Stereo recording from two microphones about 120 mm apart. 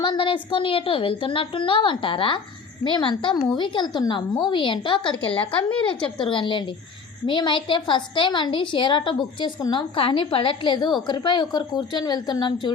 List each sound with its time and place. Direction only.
0.0 s a woman's voice: 40° left (ahead or behind)